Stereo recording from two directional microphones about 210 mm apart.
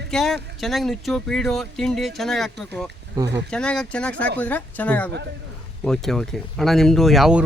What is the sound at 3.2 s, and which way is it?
Speech, 15° right (ahead or behind).